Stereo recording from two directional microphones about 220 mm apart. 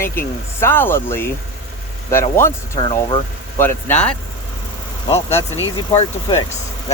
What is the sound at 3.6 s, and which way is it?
Speech, 10° left (ahead or behind).